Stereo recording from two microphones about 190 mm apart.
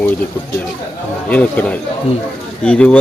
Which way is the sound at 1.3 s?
5° left (ahead or behind).